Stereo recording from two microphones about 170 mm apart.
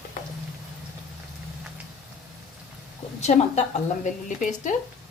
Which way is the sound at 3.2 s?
40° left (ahead or behind).